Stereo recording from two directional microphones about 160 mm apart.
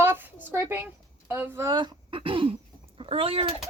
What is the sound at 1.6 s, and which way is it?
Speech, 25° right (ahead or behind).